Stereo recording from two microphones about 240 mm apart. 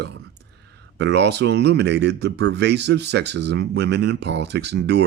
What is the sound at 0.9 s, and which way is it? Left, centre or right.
Speech, right.